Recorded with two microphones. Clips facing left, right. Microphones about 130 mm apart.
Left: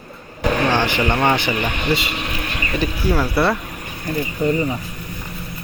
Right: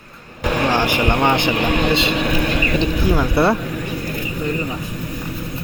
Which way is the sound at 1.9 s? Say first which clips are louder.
Right 4 dB; 25° right (ahead or behind).